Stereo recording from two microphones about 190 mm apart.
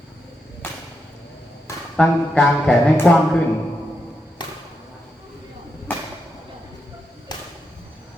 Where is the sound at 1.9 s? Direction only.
5° left (ahead or behind).